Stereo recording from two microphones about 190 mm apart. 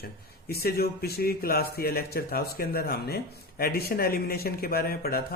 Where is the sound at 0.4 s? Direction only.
55° left (ahead or behind).